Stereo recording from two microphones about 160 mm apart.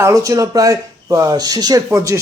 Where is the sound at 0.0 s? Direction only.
20° right (ahead or behind).